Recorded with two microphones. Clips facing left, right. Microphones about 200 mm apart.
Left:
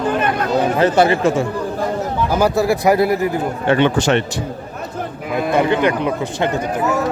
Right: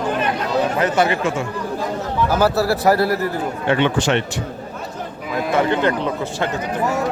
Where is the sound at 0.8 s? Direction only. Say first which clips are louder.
Left 4 dB; 30° left (ahead or behind).